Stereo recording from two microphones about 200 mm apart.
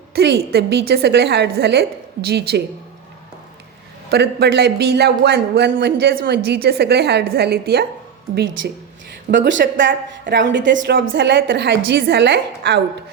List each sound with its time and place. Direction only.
0.1 s speech: 55° right (ahead or behind)
4.1 s speech: 55° right (ahead or behind)
9.3 s a woman's voice: 65° right (ahead or behind)